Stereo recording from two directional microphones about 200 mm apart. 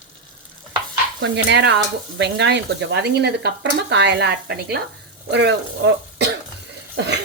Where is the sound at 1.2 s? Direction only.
60° right (ahead or behind).